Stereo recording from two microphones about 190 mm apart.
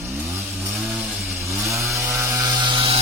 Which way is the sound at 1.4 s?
15° right (ahead or behind).